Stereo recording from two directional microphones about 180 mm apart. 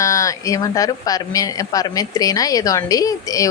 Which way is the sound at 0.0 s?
20° left (ahead or behind).